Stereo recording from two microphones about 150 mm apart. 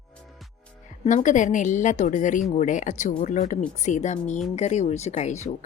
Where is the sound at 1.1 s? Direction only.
55° left (ahead or behind).